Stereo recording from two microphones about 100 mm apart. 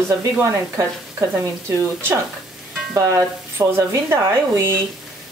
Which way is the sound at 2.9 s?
30° right (ahead or behind).